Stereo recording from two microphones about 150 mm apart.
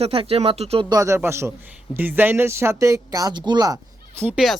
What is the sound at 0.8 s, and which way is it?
Speech, 20° right (ahead or behind).